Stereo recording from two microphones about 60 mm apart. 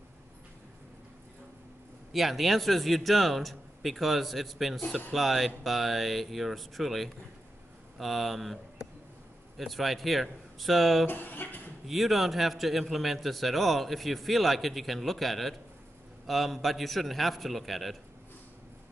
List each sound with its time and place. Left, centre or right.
2.1 s a man's voice: centre
11.1 s a sound: left
11.9 s a man's voice: centre